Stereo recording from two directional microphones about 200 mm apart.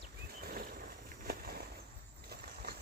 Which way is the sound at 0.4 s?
45° right (ahead or behind).